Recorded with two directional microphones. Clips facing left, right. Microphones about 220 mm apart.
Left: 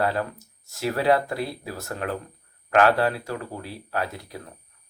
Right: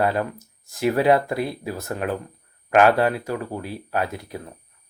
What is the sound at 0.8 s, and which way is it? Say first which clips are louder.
Speech: right 4 dB; 20° right (ahead or behind).